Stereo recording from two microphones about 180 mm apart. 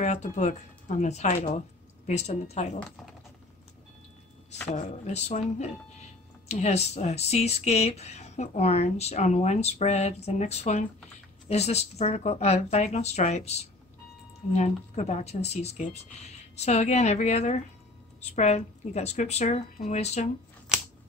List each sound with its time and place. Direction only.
0.0 s speech: 40° left (ahead or behind)
4.7 s speech: 40° left (ahead or behind)